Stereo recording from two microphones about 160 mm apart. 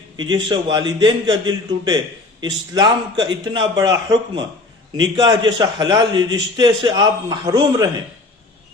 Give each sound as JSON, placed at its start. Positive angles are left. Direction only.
{"t": 0.2, "sound": "a man's voice", "side_deg": -30}